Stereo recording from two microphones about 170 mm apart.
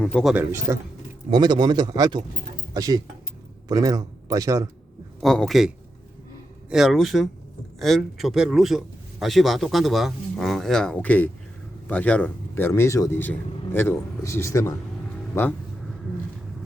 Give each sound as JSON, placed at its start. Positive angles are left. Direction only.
{"t": 0.0, "sound": "a man's voice", "side_deg": 5}
{"t": 0.3, "sound": "a man's voice", "side_deg": -15}
{"t": 1.3, "sound": "a man's voice", "side_deg": -25}
{"t": 5.2, "sound": "a man's voice", "side_deg": 5}